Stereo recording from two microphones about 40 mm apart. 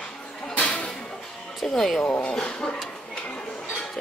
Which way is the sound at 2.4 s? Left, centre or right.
Left.